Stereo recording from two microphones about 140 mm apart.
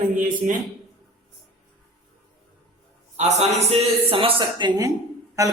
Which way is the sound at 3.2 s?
55° right (ahead or behind).